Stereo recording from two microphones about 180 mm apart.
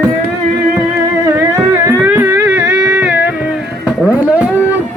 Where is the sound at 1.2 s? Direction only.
15° right (ahead or behind).